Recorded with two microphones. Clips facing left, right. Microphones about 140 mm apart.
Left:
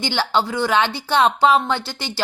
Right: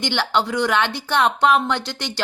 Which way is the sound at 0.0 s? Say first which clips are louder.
Left 1 dB; 5° left (ahead or behind).